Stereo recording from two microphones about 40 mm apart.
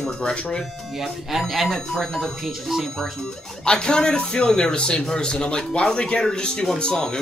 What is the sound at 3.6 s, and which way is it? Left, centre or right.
A man's voice, left.